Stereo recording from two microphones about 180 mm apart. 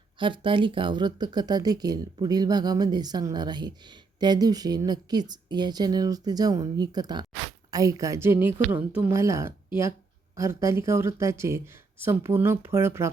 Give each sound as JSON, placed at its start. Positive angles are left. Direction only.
{"t": 0.2, "sound": "speech", "side_deg": -30}